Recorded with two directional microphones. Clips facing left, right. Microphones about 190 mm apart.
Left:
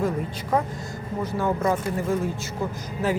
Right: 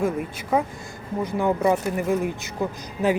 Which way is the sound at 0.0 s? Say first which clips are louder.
Right 1 dB; 10° right (ahead or behind).